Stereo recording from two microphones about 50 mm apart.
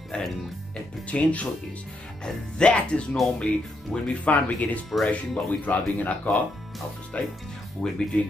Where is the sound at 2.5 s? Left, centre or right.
Left.